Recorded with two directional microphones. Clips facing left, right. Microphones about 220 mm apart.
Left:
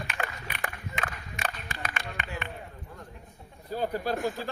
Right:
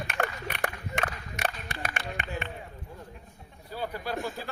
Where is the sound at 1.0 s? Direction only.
70° right (ahead or behind).